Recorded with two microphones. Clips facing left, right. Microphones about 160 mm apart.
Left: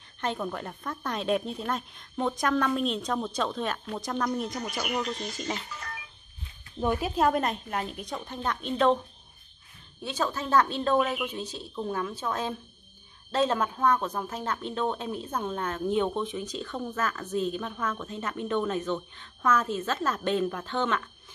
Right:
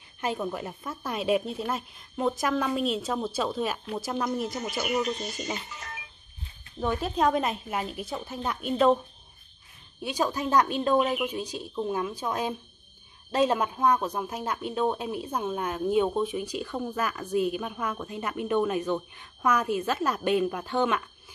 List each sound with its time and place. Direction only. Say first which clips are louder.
0.2 s a woman's voice: right 1 dB; 10° right (ahead or behind)
4.8 s speech: right 5 dB; 20° right (ahead or behind)
5.7 s music: left 1 dB; 20° right (ahead or behind)
6.8 s speech: even; 10° left (ahead or behind); by 9.0 s 5° right (ahead or behind)
10.0 s a woman's voice: right 2 dB; 15° right (ahead or behind)